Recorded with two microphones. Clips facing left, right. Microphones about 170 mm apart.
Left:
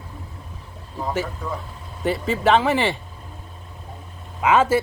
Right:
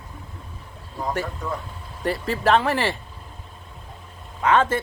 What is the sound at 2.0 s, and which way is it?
Speech, centre (ahead or behind).